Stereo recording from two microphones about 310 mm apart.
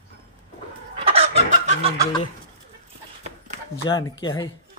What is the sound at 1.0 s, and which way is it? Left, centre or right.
Chicken, centre.